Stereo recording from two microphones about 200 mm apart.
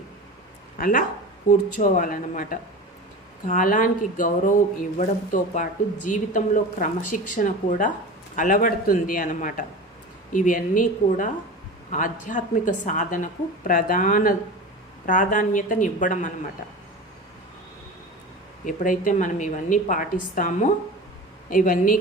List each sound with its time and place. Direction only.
0.8 s speech: 45° left (ahead or behind)
18.6 s speech: 40° left (ahead or behind)